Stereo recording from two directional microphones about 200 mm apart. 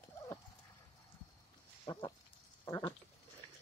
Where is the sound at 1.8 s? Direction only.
20° left (ahead or behind).